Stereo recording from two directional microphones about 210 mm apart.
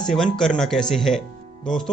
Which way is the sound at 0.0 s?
Centre (ahead or behind).